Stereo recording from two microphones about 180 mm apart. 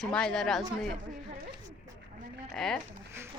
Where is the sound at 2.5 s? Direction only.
Centre (ahead or behind).